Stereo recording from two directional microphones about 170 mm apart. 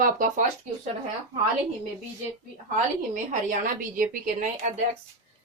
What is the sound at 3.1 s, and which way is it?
A woman's voice, 45° right (ahead or behind).